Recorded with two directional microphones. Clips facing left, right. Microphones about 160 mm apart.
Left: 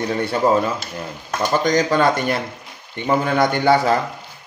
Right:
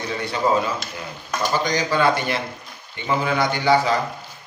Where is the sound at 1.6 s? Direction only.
50° left (ahead or behind).